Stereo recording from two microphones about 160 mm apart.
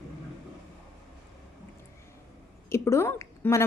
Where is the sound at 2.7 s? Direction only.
15° left (ahead or behind).